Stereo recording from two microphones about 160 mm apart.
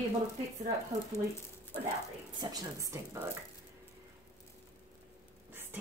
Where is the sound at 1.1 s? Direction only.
15° left (ahead or behind).